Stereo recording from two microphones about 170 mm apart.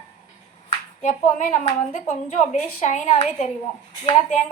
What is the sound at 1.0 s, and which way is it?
A woman's voice, 45° left (ahead or behind).